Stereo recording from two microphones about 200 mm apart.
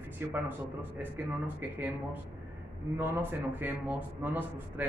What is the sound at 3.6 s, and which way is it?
A man's voice, 10° right (ahead or behind).